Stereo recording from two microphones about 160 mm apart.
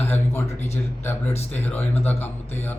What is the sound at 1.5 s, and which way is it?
Speech, 15° left (ahead or behind).